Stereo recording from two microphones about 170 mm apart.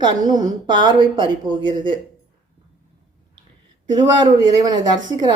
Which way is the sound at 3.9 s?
25° right (ahead or behind).